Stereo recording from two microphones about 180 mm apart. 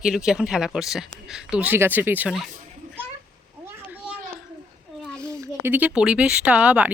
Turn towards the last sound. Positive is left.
turn(degrees=-5)  # may be behind; listen again after turning